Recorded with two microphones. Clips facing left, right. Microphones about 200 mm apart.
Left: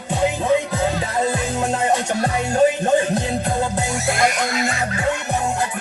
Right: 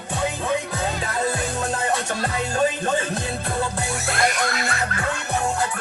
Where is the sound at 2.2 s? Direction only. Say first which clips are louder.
Left 6 dB; 20° left (ahead or behind).